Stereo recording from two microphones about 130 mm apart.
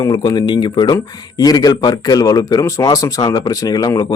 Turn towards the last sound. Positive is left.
turn(degrees=30)  # may be behind; listen again after turning